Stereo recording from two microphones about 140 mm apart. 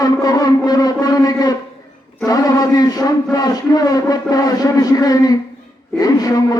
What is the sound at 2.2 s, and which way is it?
A man's voice, 25° left (ahead or behind).